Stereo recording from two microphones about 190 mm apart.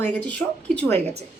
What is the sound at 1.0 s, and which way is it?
Speech, 35° right (ahead or behind).